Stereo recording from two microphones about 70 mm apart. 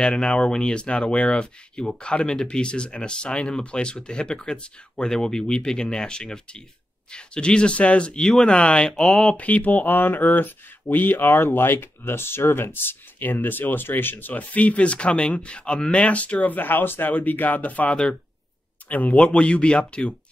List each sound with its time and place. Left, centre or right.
0.0 s speech: centre
9.4 s speech: left